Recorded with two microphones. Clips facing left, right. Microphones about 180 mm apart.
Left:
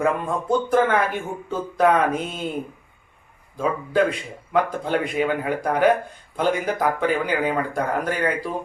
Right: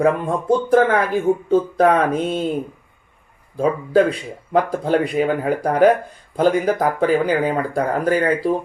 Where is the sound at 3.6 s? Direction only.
40° right (ahead or behind).